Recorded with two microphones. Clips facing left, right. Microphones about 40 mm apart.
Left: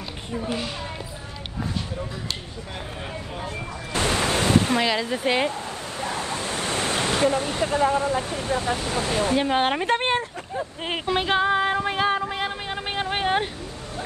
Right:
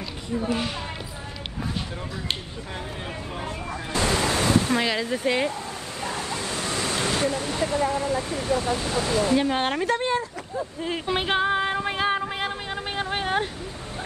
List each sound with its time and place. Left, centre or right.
3.9 s a sound: left
5.0 s speech: left
9.4 s a woman's voice: left
9.8 s speech: left
11.1 s speech: centre
12.6 s speech: left